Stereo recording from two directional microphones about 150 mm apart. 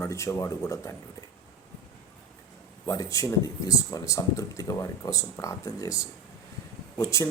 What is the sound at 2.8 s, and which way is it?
Speech, 20° left (ahead or behind).